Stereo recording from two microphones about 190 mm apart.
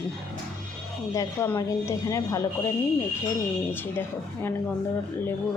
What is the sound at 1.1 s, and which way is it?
A woman's voice, 15° left (ahead or behind).